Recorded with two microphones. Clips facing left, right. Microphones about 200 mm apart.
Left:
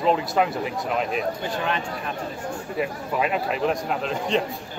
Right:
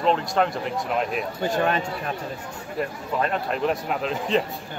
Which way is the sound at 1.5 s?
45° right (ahead or behind).